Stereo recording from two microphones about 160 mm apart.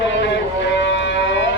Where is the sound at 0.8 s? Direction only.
90° left.